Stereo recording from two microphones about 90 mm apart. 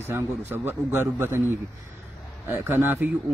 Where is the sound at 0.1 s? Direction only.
25° right (ahead or behind).